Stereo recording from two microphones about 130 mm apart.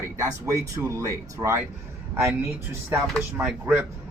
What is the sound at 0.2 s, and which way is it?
Speech, 25° right (ahead or behind).